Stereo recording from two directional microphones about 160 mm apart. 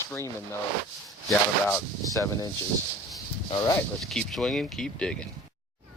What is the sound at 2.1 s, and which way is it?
Speech, 20° left (ahead or behind).